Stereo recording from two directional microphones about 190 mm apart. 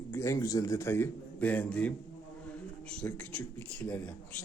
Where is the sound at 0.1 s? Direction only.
15° left (ahead or behind).